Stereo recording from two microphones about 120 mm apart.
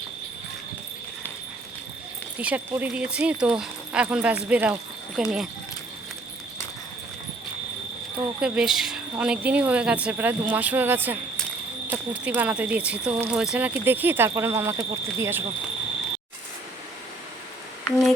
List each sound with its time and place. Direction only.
2.4 s speech: 15° right (ahead or behind)
5.1 s speech: centre (ahead or behind)
8.4 s speech: 5° right (ahead or behind)